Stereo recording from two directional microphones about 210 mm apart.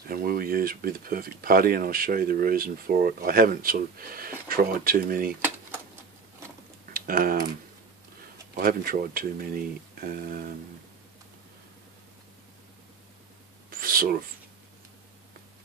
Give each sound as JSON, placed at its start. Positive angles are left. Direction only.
{"t": 0.0, "sound": "speech", "side_deg": -45}
{"t": 6.9, "sound": "speech", "side_deg": -45}
{"t": 8.5, "sound": "speech", "side_deg": -45}
{"t": 13.7, "sound": "a sound", "side_deg": -45}